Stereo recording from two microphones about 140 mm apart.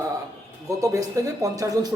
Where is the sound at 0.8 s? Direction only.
25° right (ahead or behind).